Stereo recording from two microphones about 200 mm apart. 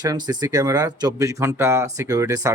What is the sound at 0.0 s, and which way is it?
Speech, 20° right (ahead or behind).